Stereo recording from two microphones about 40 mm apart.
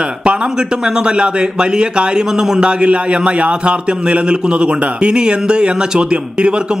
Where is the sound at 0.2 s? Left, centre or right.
Right.